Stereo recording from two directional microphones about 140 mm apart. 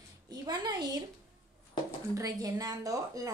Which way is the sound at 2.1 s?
25° right (ahead or behind).